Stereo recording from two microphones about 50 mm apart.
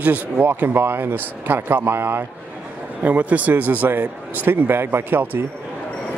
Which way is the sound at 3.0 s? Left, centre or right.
Right.